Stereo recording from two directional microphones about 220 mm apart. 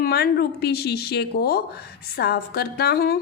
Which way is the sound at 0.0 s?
45° left (ahead or behind).